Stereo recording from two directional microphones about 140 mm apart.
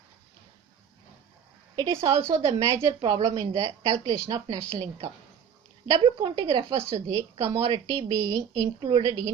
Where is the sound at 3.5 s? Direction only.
50° right (ahead or behind).